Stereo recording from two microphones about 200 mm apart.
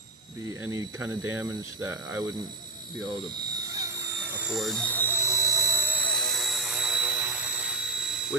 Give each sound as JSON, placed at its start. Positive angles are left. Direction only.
{"t": 0.6, "sound": "speech", "side_deg": -15}
{"t": 3.0, "sound": "a sound", "side_deg": -20}
{"t": 4.4, "sound": "jet engine", "side_deg": -5}